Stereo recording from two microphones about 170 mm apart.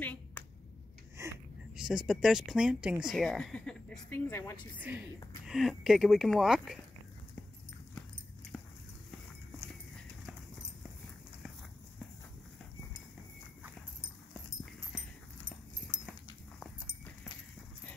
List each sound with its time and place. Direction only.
0.0 s a sound: 10° left (ahead or behind)
1.8 s speech: centre (ahead or behind)
4.3 s a woman's voice: 15° left (ahead or behind)
4.7 s speech: 10° right (ahead or behind)
14.6 s dog: 5° left (ahead or behind)
15.9 s dog: 55° right (ahead or behind)
16.5 s walk: 10° left (ahead or behind)